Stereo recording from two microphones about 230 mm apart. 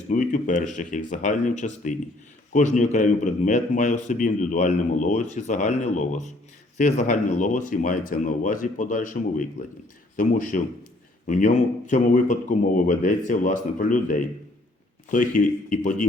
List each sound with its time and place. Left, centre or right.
0.1 s a man's voice: left